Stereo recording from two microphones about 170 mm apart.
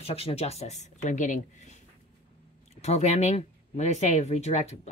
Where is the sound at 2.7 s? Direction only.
40° left (ahead or behind).